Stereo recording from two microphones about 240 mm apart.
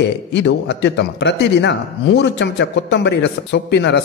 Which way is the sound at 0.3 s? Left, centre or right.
Left.